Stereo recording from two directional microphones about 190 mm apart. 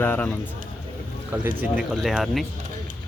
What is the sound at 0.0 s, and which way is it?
Speech, 10° left (ahead or behind).